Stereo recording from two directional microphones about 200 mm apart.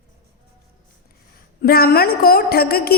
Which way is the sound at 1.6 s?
50° left (ahead or behind).